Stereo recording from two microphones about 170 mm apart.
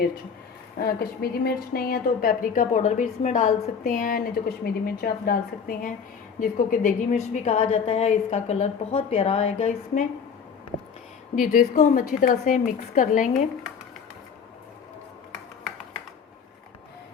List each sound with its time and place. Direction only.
0.8 s a woman's voice: 65° left (ahead or behind); by 10.0 s 40° left (ahead or behind)
11.3 s a woman's voice: 50° left (ahead or behind)